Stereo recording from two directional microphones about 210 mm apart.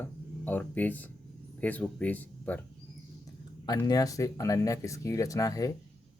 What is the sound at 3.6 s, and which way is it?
Speech, 20° left (ahead or behind).